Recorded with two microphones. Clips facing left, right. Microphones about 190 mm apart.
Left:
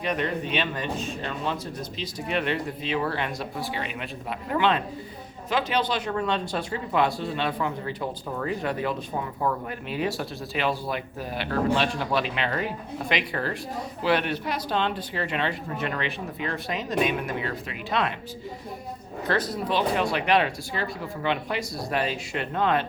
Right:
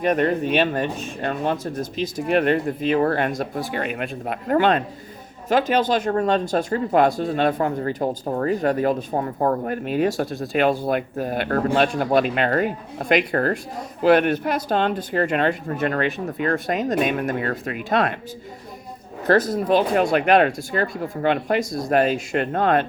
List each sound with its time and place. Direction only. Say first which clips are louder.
0.0 s speech: right 8 dB; 50° right (ahead or behind)
19.3 s speech: right 9 dB; 50° right (ahead or behind)